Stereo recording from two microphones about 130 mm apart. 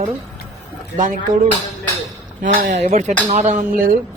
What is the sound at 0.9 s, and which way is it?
Speech, 75° right (ahead or behind).